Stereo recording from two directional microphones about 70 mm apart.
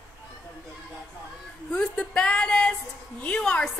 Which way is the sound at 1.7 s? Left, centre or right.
Centre.